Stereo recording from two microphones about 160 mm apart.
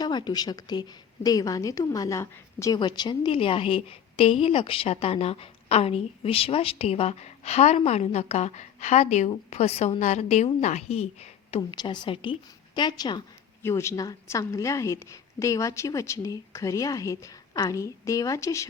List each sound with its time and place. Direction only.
0.0 s a woman's voice: 25° left (ahead or behind)
11.7 s a woman's voice: 30° left (ahead or behind)